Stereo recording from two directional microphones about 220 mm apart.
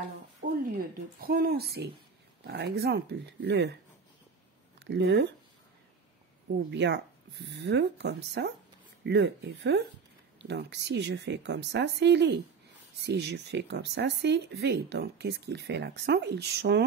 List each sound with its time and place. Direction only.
1.2 s speech: 40° right (ahead or behind)
4.7 s speech: 55° right (ahead or behind)
6.7 s speech: 50° right (ahead or behind)